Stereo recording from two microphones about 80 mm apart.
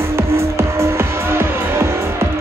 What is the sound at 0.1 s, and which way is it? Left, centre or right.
Music, right.